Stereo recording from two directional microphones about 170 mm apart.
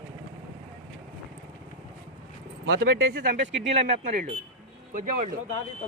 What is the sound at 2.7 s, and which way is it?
Speech, 75° right (ahead or behind).